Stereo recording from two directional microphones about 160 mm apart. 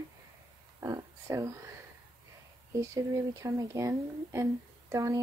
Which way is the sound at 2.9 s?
20° right (ahead or behind).